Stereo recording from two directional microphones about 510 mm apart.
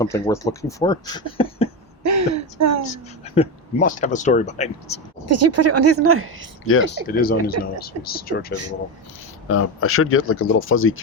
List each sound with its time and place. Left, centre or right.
0.0 s speech: centre
2.0 s speech: right
3.3 s speech: centre
5.3 s speech: right
6.7 s speech: left